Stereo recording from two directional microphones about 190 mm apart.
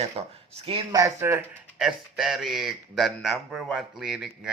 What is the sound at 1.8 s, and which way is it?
Speech, centre (ahead or behind).